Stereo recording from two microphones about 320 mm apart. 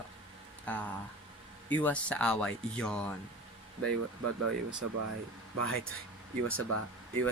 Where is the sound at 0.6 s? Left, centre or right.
Centre.